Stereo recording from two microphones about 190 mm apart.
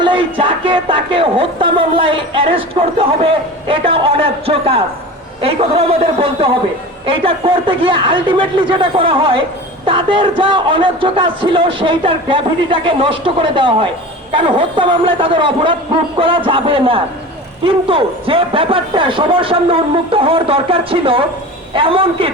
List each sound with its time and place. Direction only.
0.0 s speech: 25° right (ahead or behind)